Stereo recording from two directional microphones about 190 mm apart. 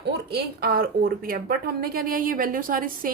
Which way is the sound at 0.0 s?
60° right (ahead or behind).